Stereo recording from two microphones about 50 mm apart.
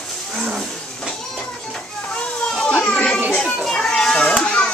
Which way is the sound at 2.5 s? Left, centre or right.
Centre.